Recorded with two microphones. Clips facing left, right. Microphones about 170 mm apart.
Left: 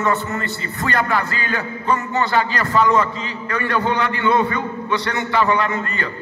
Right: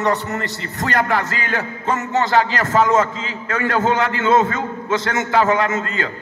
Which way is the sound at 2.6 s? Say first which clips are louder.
Right 1 dB; 45° right (ahead or behind).